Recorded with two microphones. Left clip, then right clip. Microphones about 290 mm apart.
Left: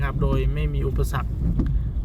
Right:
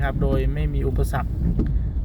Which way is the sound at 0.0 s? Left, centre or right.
Centre.